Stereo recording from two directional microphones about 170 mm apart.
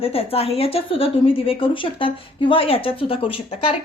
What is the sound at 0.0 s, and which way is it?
Speech, 35° left (ahead or behind).